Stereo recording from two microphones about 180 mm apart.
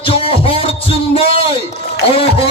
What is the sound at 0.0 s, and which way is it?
Music, 30° left (ahead or behind).